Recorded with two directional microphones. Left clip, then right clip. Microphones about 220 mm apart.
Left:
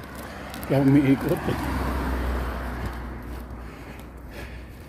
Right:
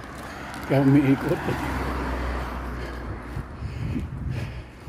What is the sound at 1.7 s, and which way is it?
Vehicle, 40° left (ahead or behind).